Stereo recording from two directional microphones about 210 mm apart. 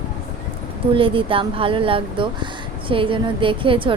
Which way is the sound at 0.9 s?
25° right (ahead or behind).